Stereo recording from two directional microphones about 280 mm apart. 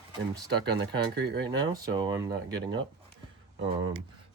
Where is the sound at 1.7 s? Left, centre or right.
Centre.